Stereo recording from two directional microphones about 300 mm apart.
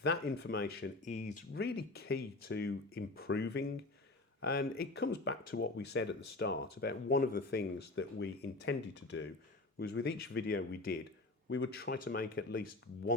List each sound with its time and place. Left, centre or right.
0.0 s speech: left